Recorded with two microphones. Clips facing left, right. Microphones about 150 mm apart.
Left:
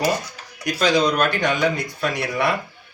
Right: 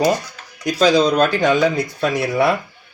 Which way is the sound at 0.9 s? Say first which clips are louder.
Right 2 dB; 30° right (ahead or behind).